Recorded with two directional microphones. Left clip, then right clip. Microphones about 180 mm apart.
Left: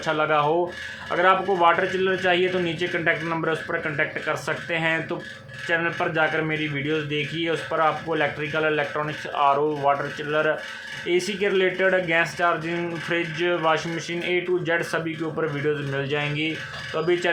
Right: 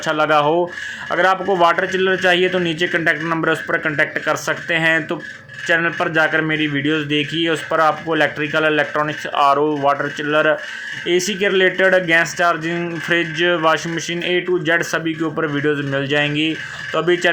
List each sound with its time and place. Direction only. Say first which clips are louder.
0.0 s speech: right 6 dB; 25° right (ahead or behind)